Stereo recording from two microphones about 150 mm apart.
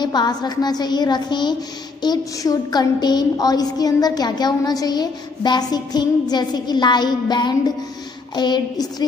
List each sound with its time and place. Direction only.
0.0 s a woman's voice: 30° left (ahead or behind)